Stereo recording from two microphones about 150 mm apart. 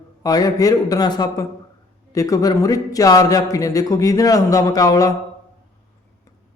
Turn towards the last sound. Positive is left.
turn(degrees=25)  # may be behind; listen again after turning